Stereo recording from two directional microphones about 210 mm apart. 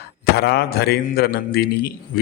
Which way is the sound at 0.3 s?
50° left (ahead or behind).